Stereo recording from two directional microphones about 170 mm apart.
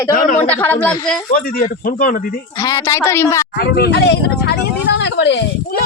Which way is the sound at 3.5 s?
70° left (ahead or behind).